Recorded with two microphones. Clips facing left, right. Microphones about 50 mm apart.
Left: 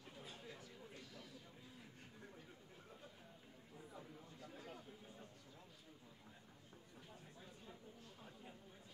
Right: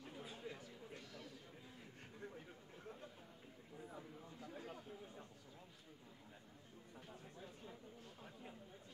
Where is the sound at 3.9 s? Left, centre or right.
Centre.